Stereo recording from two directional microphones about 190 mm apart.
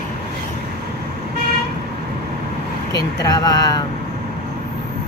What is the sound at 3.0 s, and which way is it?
Speech, 20° left (ahead or behind).